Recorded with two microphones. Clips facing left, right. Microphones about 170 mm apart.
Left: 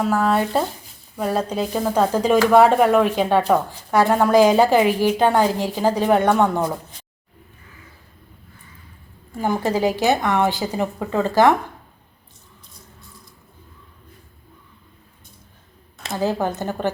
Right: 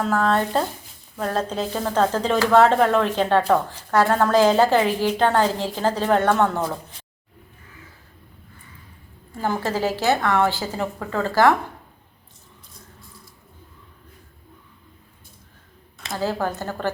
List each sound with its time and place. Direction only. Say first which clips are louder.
0.0 s speech: left 2 dB; 10° left (ahead or behind)
9.3 s speech: left 3 dB; 15° left (ahead or behind)
16.1 s speech: left 3 dB; 20° left (ahead or behind)